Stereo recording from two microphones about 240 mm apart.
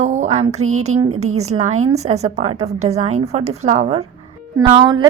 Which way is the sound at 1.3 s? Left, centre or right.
Right.